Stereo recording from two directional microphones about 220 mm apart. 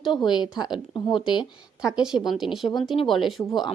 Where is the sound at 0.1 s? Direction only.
20° left (ahead or behind).